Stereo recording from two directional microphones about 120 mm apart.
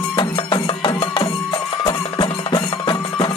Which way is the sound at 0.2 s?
40° left (ahead or behind).